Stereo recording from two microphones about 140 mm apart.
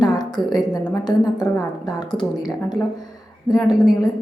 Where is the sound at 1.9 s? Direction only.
30° left (ahead or behind).